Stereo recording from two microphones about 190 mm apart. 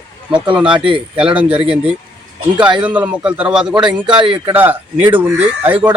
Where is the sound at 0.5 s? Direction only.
5° right (ahead or behind).